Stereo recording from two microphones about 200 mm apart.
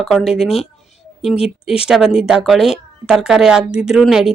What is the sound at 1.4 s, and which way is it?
A woman's voice, 5° right (ahead or behind).